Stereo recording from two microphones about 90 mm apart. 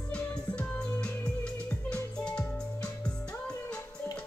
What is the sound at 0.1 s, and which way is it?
Music, 15° left (ahead or behind).